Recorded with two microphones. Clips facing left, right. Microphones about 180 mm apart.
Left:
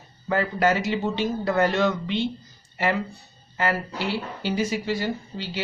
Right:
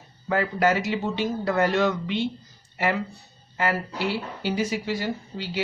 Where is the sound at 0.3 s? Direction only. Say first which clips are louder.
Even; 10° right (ahead or behind).